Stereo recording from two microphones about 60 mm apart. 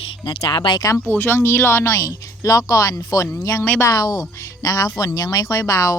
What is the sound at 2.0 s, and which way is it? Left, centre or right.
Speech, left.